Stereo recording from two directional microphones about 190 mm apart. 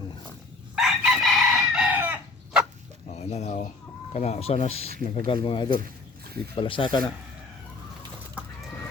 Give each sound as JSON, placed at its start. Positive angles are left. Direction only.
{"t": 0.8, "sound": "chicken", "side_deg": 0}
{"t": 3.1, "sound": "a sound", "side_deg": 35}
{"t": 4.1, "sound": "speech", "side_deg": 35}